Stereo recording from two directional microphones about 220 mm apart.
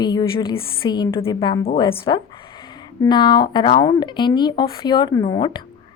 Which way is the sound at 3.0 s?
20° left (ahead or behind).